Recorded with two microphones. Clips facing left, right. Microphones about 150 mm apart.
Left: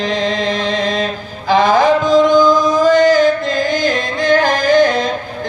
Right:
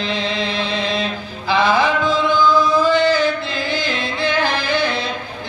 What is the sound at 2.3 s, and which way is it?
Chant, 15° left (ahead or behind).